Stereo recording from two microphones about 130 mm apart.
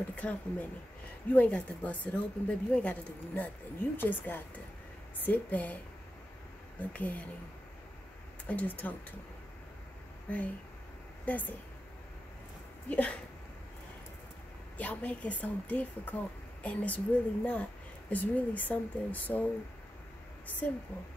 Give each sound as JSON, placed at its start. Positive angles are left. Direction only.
{"t": 0.1, "sound": "a woman's voice", "side_deg": 10}
{"t": 6.8, "sound": "a woman's voice", "side_deg": 10}
{"t": 8.5, "sound": "a woman's voice", "side_deg": 10}
{"t": 10.3, "sound": "a woman's voice", "side_deg": 15}
{"t": 12.8, "sound": "a woman's voice", "side_deg": 10}
{"t": 14.8, "sound": "a woman's voice", "side_deg": 10}